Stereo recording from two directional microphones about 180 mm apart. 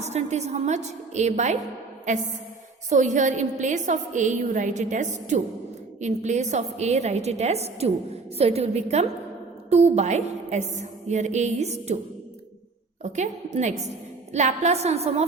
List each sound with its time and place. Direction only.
0.0 s a woman's voice: 40° right (ahead or behind)
13.0 s a woman's voice: 40° right (ahead or behind)